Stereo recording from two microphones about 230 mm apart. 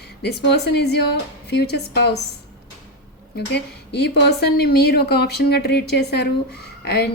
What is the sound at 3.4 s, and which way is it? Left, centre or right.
A woman's voice, left.